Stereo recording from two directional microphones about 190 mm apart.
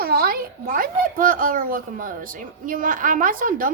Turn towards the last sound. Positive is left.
turn(degrees=-45)  # may be behind; listen again after turning